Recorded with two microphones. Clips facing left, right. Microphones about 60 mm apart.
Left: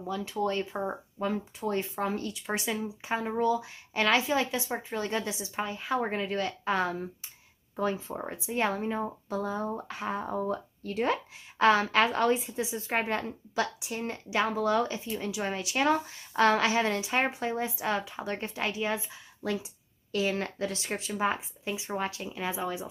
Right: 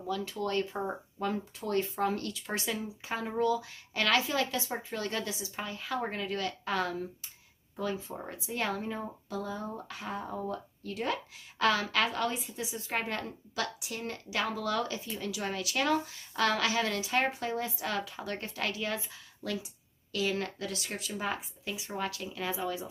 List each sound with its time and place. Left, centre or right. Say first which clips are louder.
0.0 s speech: left 3 dB; left